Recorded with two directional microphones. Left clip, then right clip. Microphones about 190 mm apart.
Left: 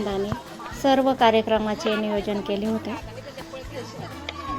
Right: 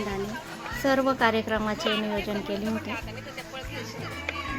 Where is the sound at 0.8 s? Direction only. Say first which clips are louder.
Left 4 dB; 5° left (ahead or behind).